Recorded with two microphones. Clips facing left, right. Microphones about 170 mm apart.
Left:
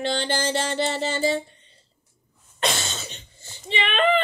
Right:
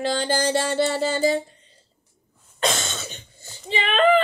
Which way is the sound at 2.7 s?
45° right (ahead or behind).